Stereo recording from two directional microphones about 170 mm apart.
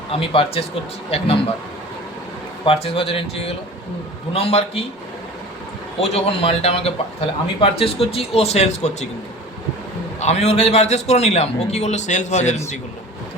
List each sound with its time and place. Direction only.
0.1 s a man's voice: 35° left (ahead or behind)
2.6 s a man's voice: 35° left (ahead or behind)
6.0 s a man's voice: 35° left (ahead or behind)
10.2 s a man's voice: 40° left (ahead or behind)